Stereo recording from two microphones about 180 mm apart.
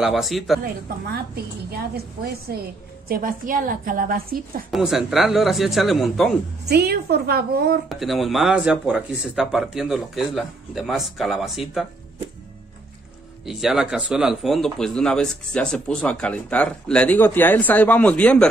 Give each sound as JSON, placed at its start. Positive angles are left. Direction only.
{"t": 0.0, "sound": "speech", "side_deg": 0}
{"t": 1.1, "sound": "a woman's voice", "side_deg": -60}
{"t": 4.6, "sound": "speech", "side_deg": 0}
{"t": 6.7, "sound": "a woman's voice", "side_deg": -60}
{"t": 7.9, "sound": "speech", "side_deg": 0}
{"t": 13.5, "sound": "speech", "side_deg": 0}